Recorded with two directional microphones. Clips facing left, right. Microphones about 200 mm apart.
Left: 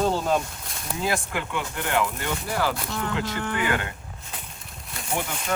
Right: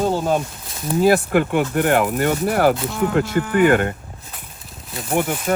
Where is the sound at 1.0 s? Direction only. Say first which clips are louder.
Right 12 dB; 65° right (ahead or behind).